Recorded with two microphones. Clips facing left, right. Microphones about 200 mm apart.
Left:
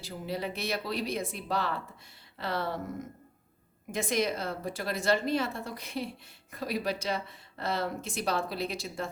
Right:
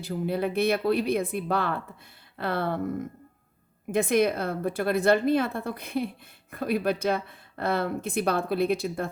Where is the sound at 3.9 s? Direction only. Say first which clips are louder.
Right 7 dB; 60° right (ahead or behind).